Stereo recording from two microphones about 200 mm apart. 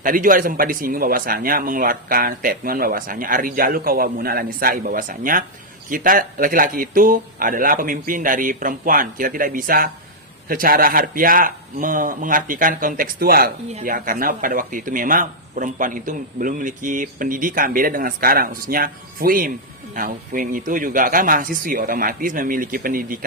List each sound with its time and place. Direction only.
0.0 s speech: 45° right (ahead or behind)
13.7 s speech: 40° right (ahead or behind)